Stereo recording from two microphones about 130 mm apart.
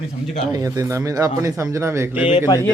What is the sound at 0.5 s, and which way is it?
Speech, 25° right (ahead or behind).